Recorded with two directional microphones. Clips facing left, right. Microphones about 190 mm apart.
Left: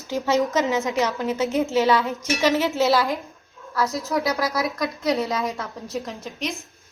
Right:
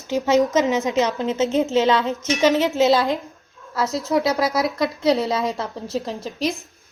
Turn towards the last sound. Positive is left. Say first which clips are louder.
# right 6 dB
turn(degrees=-35)  # may be behind; listen again after turning